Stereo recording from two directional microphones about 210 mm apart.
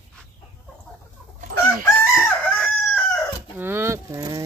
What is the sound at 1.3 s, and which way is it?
Chicken, 40° right (ahead or behind).